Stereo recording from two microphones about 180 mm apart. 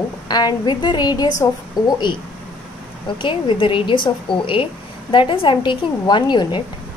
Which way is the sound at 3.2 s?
30° left (ahead or behind).